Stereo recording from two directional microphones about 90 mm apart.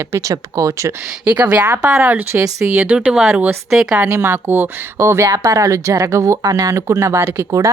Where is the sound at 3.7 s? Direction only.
5° right (ahead or behind).